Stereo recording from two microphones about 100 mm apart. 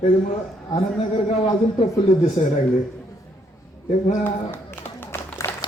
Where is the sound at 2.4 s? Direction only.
90° left.